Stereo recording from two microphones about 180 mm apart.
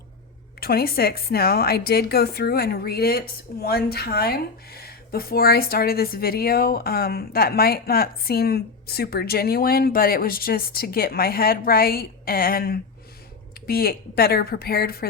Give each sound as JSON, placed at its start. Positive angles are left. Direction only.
{"t": 0.6, "sound": "a woman's voice", "side_deg": 60}